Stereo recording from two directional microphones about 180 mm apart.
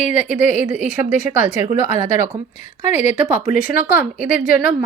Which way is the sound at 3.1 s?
45° left (ahead or behind).